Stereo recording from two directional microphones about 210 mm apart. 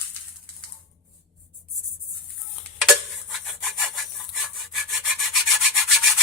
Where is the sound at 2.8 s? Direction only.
Centre (ahead or behind).